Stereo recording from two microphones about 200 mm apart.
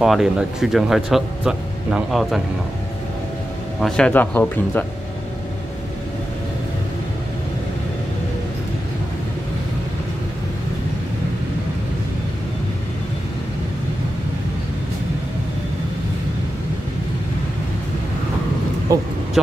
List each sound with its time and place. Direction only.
0.0 s speech: centre (ahead or behind)
3.8 s speech: 5° left (ahead or behind)
18.9 s speech: 15° right (ahead or behind)
19.4 s speech: centre (ahead or behind)